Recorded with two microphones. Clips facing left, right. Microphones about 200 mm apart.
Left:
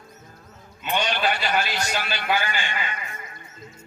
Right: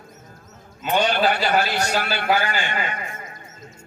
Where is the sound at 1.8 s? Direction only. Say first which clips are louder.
Right 5 dB; 40° right (ahead or behind).